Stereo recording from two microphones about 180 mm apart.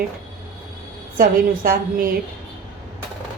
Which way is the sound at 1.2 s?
50° right (ahead or behind).